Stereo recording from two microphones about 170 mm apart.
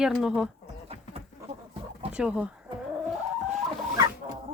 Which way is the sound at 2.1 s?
5° right (ahead or behind).